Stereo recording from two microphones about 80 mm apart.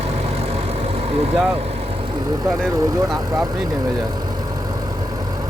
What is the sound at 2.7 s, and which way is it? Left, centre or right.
Speech, right.